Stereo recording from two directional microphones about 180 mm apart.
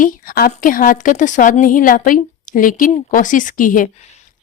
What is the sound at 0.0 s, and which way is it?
Speech, 55° left (ahead or behind).